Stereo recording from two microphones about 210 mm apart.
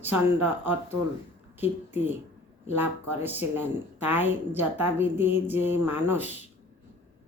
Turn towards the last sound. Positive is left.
turn(degrees=-10)  # may be behind; listen again after turning